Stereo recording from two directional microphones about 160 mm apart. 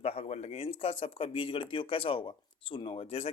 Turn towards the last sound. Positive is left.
turn(degrees=40)  # may be behind; listen again after turning